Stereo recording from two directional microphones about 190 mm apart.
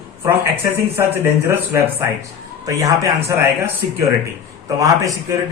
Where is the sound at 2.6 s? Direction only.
20° right (ahead or behind).